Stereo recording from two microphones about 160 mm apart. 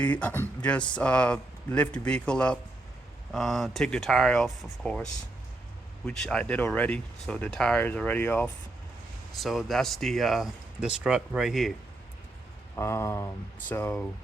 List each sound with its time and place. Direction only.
0.0 s speech: 10° left (ahead or behind)
6.1 s speech: 5° left (ahead or behind)
9.4 s speech: centre (ahead or behind)
12.7 s speech: 15° left (ahead or behind)